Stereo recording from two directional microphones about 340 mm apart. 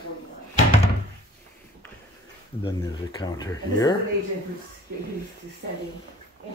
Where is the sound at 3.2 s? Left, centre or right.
Centre.